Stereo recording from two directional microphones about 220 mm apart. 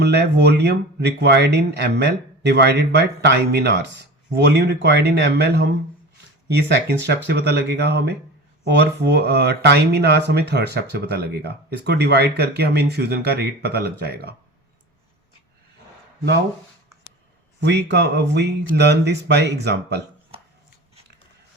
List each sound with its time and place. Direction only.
0.0 s speech: 50° right (ahead or behind)
17.6 s speech: 50° right (ahead or behind)